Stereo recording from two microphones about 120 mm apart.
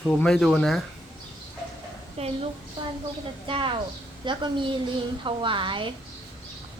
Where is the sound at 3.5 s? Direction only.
45° right (ahead or behind).